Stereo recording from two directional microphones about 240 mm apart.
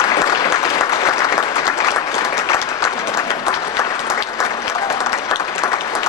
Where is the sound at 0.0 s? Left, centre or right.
Centre.